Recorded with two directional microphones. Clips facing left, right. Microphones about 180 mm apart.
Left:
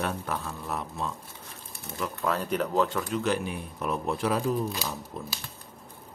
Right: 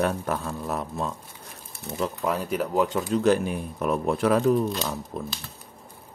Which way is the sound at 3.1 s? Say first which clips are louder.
Right 7 dB; 40° right (ahead or behind).